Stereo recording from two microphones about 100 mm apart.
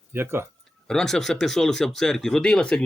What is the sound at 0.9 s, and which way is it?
Speech, 5° left (ahead or behind).